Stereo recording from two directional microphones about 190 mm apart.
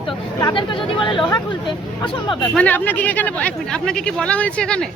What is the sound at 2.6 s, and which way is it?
Speech, 10° left (ahead or behind).